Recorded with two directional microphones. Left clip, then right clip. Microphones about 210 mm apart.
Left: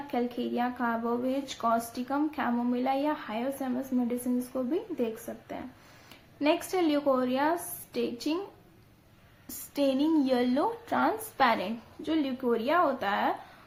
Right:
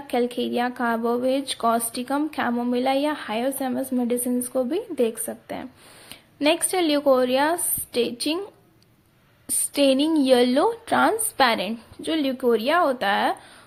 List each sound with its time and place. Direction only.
0.1 s a woman's voice: 45° right (ahead or behind)
9.7 s a woman's voice: 40° right (ahead or behind)